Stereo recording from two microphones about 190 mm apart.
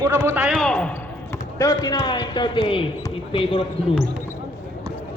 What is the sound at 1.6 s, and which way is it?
A man's voice, 20° left (ahead or behind).